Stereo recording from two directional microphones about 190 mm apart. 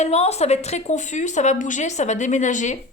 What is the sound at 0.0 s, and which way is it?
A woman's voice, 35° left (ahead or behind).